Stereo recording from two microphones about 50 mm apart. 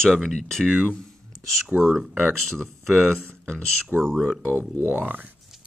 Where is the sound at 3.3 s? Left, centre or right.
Centre.